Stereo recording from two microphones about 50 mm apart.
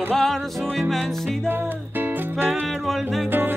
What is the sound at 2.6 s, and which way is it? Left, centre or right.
Music, centre.